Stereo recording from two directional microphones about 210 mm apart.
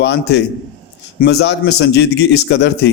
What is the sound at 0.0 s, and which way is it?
A man's voice, 55° left (ahead or behind).